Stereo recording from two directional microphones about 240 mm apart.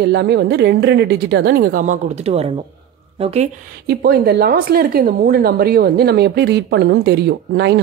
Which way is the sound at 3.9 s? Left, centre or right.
Right.